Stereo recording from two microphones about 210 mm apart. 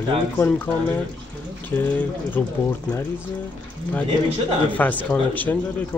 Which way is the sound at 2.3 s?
10° left (ahead or behind).